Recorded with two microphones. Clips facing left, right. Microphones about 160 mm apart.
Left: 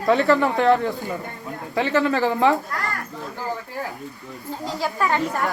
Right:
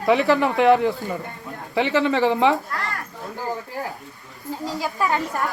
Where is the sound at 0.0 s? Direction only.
Centre (ahead or behind).